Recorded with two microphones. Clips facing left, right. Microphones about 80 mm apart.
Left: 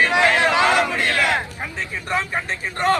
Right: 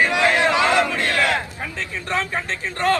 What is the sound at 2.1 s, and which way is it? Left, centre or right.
Speech, centre.